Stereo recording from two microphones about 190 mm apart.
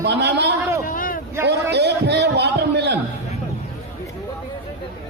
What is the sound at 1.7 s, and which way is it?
A man's voice, 60° right (ahead or behind).